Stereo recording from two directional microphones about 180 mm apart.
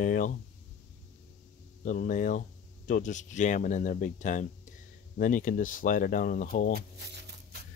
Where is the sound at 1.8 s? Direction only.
45° left (ahead or behind).